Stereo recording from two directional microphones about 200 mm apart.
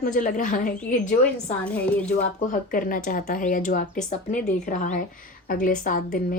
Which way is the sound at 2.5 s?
40° left (ahead or behind).